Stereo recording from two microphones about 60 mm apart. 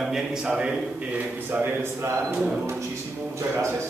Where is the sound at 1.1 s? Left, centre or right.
Right.